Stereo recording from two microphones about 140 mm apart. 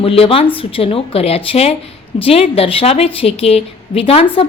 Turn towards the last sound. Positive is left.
turn(degrees=45)  # may be behind; listen again after turning